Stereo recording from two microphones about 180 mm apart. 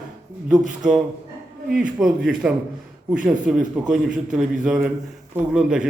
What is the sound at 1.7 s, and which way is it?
A man's voice, 5° right (ahead or behind).